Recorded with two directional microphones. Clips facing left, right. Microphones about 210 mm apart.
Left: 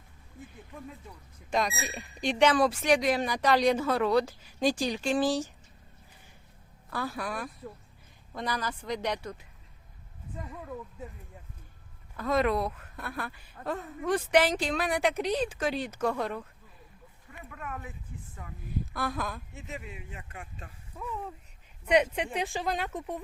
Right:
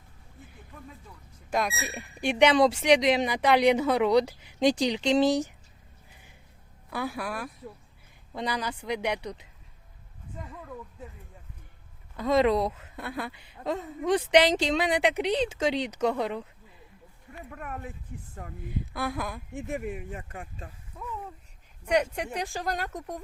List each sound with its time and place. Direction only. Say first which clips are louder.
1.5 s a woman's voice: right 1 dB; 5° right (ahead or behind)
6.9 s speech: right 2 dB; 15° right (ahead or behind)
12.1 s a woman's voice: right 4 dB; 20° right (ahead or behind)
18.9 s speech: right 2 dB; 10° right (ahead or behind)
19.5 s speech: right 9 dB; 55° right (ahead or behind); by 20.7 s 40° right (ahead or behind)
21.9 s speech: left 1 dB; 5° left (ahead or behind)